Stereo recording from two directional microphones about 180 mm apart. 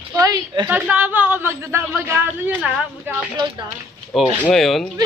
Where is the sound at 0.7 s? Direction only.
10° right (ahead or behind).